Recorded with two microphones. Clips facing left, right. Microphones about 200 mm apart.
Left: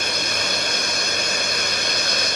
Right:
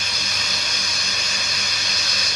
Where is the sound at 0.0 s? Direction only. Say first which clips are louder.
Left 7 dB; 60° left (ahead or behind).